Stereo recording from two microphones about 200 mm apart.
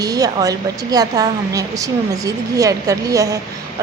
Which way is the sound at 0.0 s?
20° right (ahead or behind).